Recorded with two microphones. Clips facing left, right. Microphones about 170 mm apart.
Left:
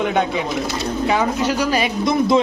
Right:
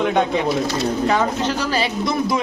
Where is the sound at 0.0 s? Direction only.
Centre (ahead or behind).